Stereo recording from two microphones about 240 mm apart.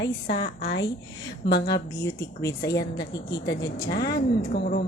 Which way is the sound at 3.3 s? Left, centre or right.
Left.